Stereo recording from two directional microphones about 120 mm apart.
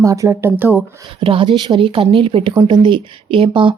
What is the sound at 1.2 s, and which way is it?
Speech, 45° right (ahead or behind).